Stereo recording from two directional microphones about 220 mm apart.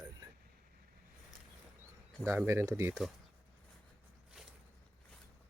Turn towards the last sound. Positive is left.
turn(degrees=0)  # may be behind; listen again after turning